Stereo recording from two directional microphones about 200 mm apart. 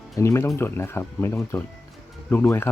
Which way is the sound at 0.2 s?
15° left (ahead or behind).